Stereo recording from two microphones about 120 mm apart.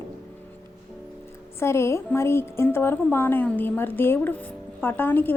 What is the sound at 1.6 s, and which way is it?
A woman's voice, 20° left (ahead or behind).